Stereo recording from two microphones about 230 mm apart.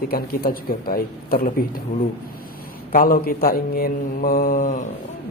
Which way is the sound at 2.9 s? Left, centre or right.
Left.